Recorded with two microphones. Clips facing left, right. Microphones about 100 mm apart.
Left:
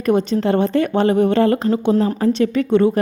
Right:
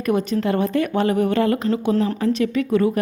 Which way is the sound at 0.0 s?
30° left (ahead or behind).